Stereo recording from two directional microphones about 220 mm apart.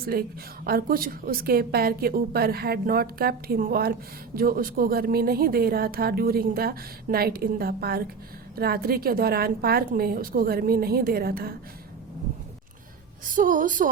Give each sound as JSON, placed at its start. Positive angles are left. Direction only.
{"t": 0.0, "sound": "a woman's voice", "side_deg": -40}
{"t": 13.3, "sound": "a woman's voice", "side_deg": -35}